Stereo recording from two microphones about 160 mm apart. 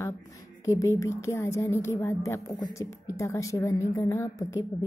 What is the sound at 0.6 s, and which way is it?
Speech, 20° left (ahead or behind).